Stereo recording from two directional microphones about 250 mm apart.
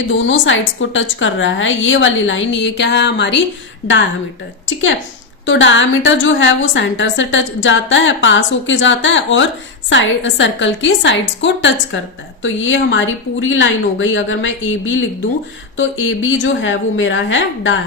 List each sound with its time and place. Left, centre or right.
0.3 s a woman's voice: left
5.5 s a woman's voice: left